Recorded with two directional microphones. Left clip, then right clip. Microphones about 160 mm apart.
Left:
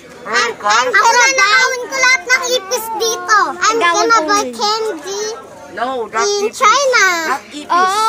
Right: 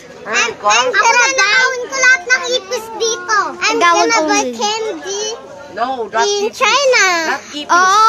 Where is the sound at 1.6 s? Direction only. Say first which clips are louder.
Even; 30° left (ahead or behind).